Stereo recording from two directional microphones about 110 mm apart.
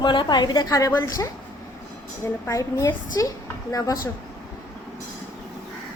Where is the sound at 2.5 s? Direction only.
30° left (ahead or behind).